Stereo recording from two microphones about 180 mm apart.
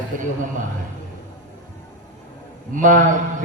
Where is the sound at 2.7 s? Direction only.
45° right (ahead or behind).